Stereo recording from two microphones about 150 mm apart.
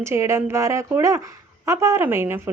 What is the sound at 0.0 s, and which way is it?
A woman's voice, 20° right (ahead or behind).